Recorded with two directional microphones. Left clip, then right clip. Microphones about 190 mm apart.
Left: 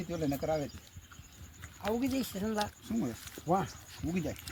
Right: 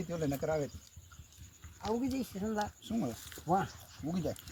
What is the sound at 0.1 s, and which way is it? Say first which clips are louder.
Speech: left 1 dB; 15° right (ahead or behind).